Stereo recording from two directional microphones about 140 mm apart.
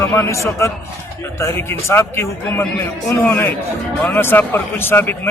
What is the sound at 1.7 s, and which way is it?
A man's voice, 15° left (ahead or behind).